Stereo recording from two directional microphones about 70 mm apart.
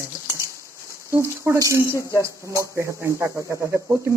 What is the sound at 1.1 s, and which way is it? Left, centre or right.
Speech, right.